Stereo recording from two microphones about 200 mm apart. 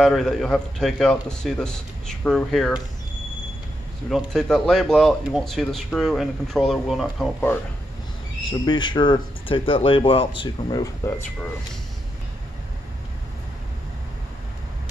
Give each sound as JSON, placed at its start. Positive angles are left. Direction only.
{"t": 0.0, "sound": "speech", "side_deg": 0}
{"t": 4.1, "sound": "speech", "side_deg": 5}
{"t": 8.5, "sound": "speech", "side_deg": 25}